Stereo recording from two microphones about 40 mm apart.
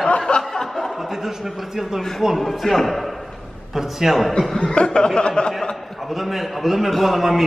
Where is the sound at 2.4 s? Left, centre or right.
Centre.